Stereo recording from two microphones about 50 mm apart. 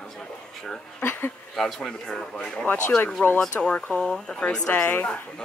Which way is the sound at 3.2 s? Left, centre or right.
Left.